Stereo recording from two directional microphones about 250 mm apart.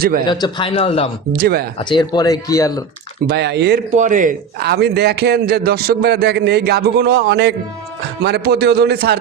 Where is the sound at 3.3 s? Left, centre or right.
Right.